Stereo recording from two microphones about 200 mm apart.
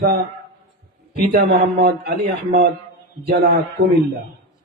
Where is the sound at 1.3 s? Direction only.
55° right (ahead or behind).